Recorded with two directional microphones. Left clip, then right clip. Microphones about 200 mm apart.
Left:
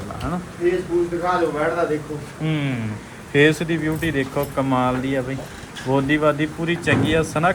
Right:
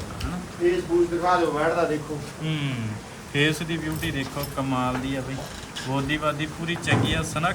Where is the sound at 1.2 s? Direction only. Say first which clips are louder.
Left 2 dB; 25° right (ahead or behind).